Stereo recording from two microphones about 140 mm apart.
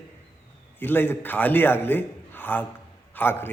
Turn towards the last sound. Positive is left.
turn(degrees=15)  # may be behind; listen again after turning